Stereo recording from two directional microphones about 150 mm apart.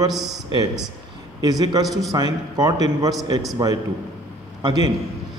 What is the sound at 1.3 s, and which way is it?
A man's voice, 25° right (ahead or behind).